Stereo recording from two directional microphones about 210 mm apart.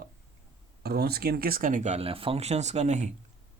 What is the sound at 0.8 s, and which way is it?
Speech, 50° right (ahead or behind).